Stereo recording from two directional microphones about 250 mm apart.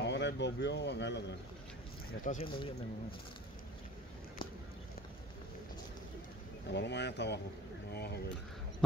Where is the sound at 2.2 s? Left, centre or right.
Left.